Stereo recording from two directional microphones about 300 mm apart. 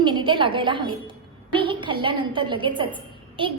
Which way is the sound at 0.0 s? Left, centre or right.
Centre.